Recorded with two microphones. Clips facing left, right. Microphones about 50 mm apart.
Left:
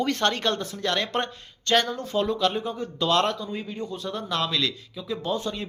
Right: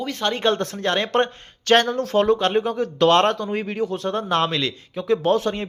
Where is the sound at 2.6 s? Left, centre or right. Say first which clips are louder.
Right 9 dB; right.